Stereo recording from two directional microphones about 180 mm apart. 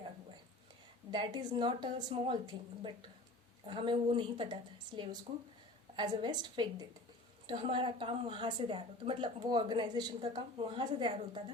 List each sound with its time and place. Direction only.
1.1 s a woman's voice: 25° right (ahead or behind)